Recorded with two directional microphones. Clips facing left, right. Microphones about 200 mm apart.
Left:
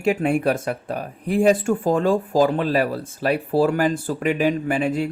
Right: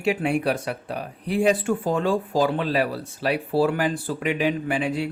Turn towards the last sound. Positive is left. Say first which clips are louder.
# left 3 dB
turn(degrees=45)  # may be behind; listen again after turning